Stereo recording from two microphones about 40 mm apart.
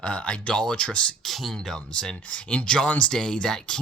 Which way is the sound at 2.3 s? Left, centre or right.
Left.